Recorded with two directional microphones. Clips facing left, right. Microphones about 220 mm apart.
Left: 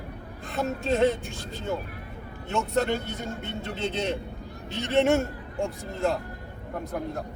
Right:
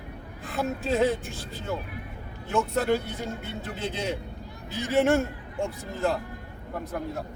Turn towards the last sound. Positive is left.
turn(degrees=0)  # may be behind; listen again after turning